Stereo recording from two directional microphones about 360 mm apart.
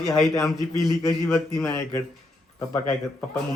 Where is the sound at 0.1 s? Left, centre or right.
Centre.